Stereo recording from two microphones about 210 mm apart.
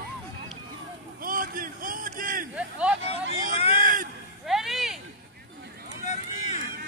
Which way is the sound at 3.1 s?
30° left (ahead or behind).